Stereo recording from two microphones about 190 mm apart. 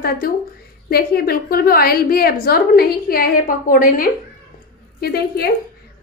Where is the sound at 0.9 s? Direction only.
55° left (ahead or behind).